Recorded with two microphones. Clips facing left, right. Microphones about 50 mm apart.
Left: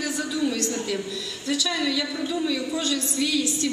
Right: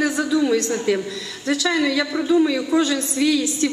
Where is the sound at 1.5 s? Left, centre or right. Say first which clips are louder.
Right 6 dB; right.